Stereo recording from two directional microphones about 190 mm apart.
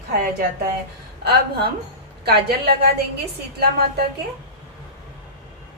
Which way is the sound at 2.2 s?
55° right (ahead or behind).